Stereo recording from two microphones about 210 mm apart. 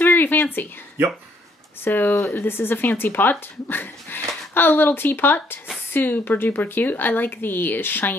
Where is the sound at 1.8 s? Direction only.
10° left (ahead or behind).